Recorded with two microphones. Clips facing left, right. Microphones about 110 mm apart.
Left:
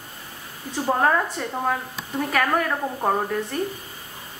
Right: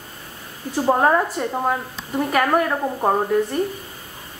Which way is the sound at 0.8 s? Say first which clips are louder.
Right 3 dB; 20° right (ahead or behind).